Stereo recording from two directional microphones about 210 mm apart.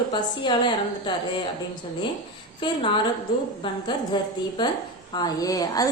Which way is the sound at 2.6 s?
25° left (ahead or behind).